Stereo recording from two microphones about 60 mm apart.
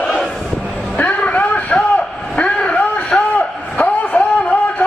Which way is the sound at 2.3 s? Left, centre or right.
Centre.